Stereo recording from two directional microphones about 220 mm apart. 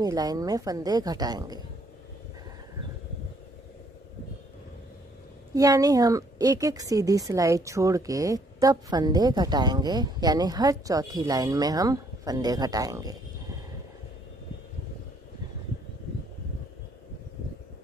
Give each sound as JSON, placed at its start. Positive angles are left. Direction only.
{"t": 0.0, "sound": "a woman's voice", "side_deg": -15}
{"t": 5.5, "sound": "a woman's voice", "side_deg": -15}